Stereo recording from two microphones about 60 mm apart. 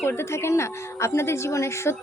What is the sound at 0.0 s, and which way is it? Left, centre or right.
A woman's voice, left.